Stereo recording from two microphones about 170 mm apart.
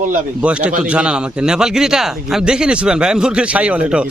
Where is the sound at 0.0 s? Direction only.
50° right (ahead or behind).